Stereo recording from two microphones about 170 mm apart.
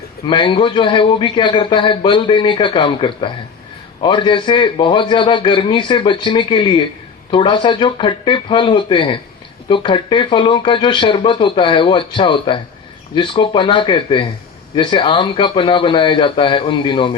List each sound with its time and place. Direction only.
0.3 s a man's voice: 30° left (ahead or behind)